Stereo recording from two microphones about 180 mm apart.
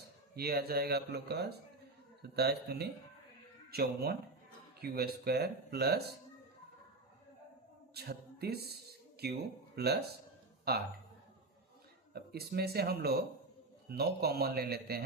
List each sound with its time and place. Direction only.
0.3 s speech: 60° right (ahead or behind)
7.9 s a sound: 60° right (ahead or behind)
9.7 s speech: 65° right (ahead or behind)
12.1 s speech: 60° right (ahead or behind)